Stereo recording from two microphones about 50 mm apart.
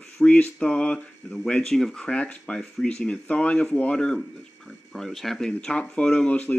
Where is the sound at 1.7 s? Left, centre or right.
Centre.